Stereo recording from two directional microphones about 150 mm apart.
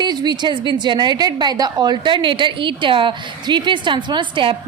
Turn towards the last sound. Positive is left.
turn(degrees=-35)  # may be behind; listen again after turning